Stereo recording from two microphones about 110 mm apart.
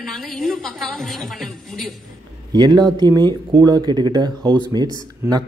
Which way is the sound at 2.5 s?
40° right (ahead or behind).